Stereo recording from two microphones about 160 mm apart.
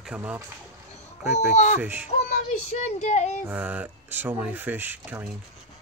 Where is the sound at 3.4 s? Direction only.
10° right (ahead or behind).